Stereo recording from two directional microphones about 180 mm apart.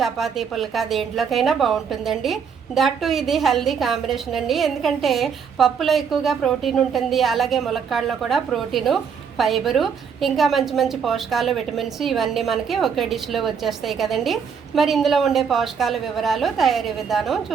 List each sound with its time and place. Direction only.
0.0 s a woman's voice: centre (ahead or behind)